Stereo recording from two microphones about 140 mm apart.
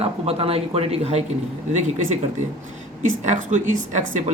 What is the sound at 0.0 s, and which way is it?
Speech, 45° right (ahead or behind).